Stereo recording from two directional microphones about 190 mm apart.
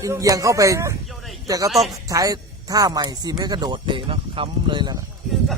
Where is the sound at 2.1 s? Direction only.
20° right (ahead or behind).